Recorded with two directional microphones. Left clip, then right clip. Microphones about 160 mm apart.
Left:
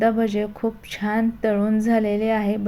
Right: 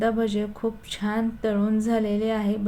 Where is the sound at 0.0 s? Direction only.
10° left (ahead or behind).